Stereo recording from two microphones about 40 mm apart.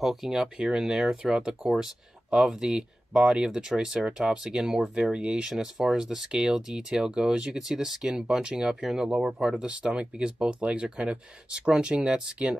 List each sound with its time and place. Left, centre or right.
0.0 s speech: centre
0.4 s speech: right
0.8 s speech: centre
5.5 s speech: centre
9.1 s speech: centre
9.6 s speech: right